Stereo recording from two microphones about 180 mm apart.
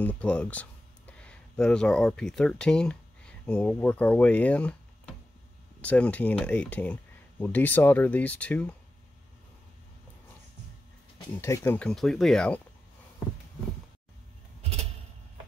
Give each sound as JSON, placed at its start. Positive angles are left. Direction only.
{"t": 0.0, "sound": "speech", "side_deg": 5}
{"t": 11.3, "sound": "speech", "side_deg": 15}
{"t": 14.6, "sound": "vehicle", "side_deg": -35}